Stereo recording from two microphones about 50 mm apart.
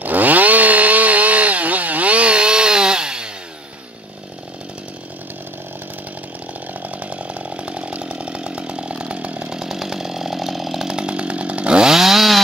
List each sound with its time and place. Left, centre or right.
0.0 s chainsaw: right; by 3.3 s centre
6.8 s chainsaw: right
9.6 s chainsaw: centre
10.9 s chainsaw: centre